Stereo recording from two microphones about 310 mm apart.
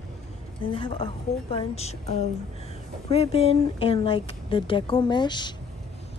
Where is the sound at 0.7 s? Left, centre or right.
Centre.